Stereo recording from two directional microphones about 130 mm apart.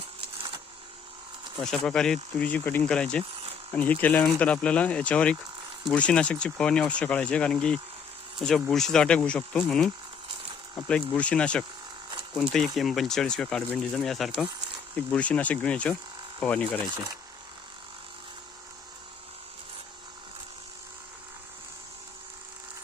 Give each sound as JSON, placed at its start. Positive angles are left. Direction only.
{"t": 1.6, "sound": "speech", "side_deg": 5}